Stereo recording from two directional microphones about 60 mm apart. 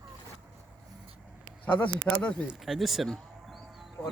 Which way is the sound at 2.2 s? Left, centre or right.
Left.